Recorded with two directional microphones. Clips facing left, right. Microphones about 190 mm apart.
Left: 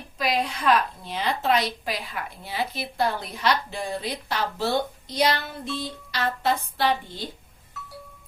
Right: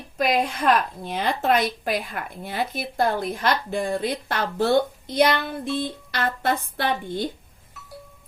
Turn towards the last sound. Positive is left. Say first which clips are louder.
# right 1 dB
turn(degrees=-55)  # may be behind; listen again after turning